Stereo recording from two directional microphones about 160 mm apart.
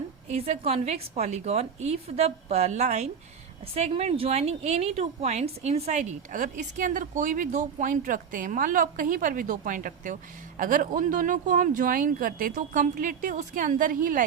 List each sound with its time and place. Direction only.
0.3 s a woman's voice: 40° right (ahead or behind); by 14.3 s 60° right (ahead or behind)